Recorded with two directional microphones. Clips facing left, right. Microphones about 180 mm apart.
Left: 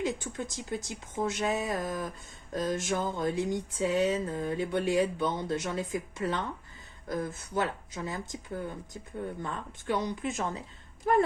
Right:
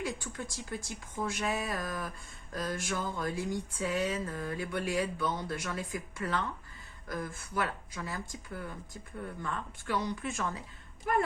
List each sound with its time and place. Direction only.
0.0 s speech: 20° left (ahead or behind)